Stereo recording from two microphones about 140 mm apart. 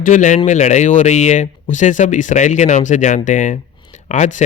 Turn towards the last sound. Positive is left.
turn(degrees=60)  # may be behind; listen again after turning